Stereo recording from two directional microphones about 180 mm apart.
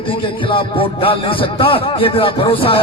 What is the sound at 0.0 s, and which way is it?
Speech, 30° left (ahead or behind).